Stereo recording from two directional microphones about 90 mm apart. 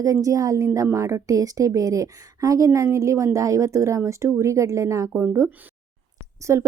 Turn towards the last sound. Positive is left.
turn(degrees=-35)  # may be behind; listen again after turning